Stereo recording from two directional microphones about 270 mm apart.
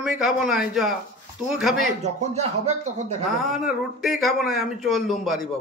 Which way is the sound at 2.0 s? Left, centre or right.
Right.